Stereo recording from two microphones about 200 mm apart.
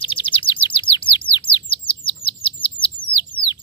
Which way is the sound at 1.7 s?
25° left (ahead or behind).